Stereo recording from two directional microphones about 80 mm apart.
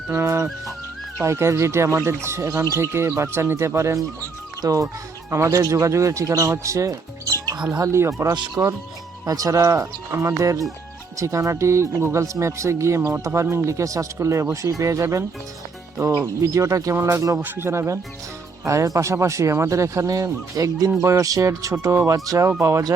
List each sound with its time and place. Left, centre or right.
0.1 s speech: right
4.6 s speech: right
8.3 s speech: right
9.6 s speech: right
17.4 s speech: right